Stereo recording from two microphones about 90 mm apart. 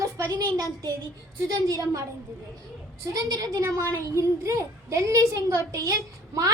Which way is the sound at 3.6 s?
35° right (ahead or behind).